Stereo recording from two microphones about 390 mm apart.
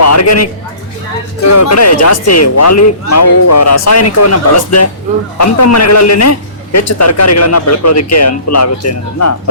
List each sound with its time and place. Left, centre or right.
0.0 s speech: left